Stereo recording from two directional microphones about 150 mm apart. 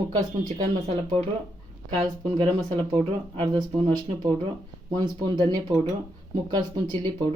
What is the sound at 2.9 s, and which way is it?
Speech, 30° right (ahead or behind).